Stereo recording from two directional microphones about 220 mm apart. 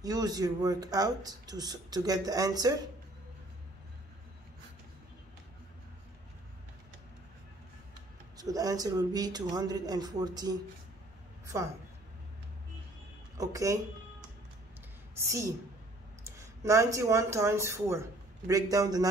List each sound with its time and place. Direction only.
0.0 s speech: 15° right (ahead or behind)
8.4 s a woman's voice: 15° right (ahead or behind)
13.4 s speech: 15° right (ahead or behind)
15.1 s speech: 15° right (ahead or behind)